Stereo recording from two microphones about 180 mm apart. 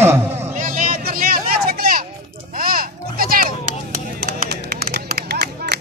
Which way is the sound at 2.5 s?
55° right (ahead or behind).